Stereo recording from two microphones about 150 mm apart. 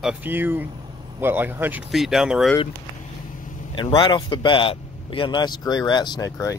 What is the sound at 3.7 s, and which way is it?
A man's voice, 35° left (ahead or behind).